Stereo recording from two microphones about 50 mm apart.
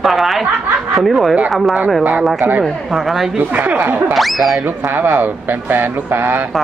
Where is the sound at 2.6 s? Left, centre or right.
Centre.